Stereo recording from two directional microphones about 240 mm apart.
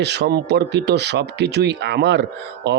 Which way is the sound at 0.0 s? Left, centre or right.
Right.